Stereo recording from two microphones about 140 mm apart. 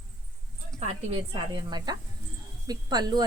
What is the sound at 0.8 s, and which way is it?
Speech, 45° right (ahead or behind).